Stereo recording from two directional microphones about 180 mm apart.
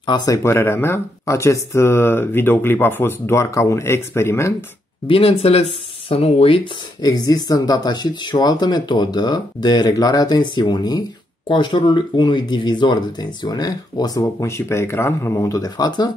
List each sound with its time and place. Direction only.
0.0 s speech: 25° left (ahead or behind)
5.0 s speech: 30° left (ahead or behind)